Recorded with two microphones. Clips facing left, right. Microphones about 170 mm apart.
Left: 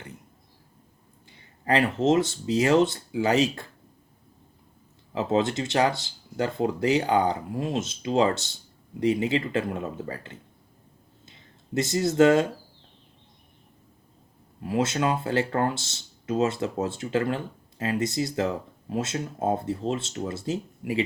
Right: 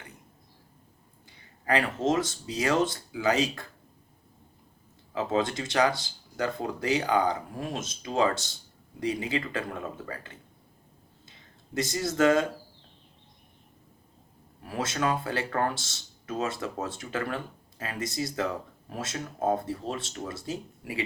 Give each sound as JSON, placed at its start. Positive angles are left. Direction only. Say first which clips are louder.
{"t": 2.0, "sound": "speech", "louder": "left 5 dB", "side_deg": 25}
{"t": 5.1, "sound": "speech", "louder": "left 3 dB", "side_deg": 25}
{"t": 11.7, "sound": "speech", "louder": "left 5 dB", "side_deg": 25}
{"t": 14.6, "sound": "speech", "louder": "left 5 dB", "side_deg": 20}